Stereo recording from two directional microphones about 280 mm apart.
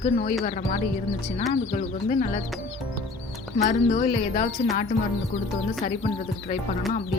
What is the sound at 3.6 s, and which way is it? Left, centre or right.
Speech, left.